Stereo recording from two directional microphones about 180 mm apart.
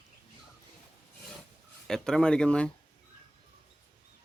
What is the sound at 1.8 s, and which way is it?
Speech, 5° left (ahead or behind).